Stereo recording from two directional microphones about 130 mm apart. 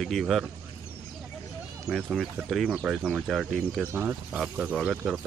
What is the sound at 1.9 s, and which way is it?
Speech, 5° right (ahead or behind).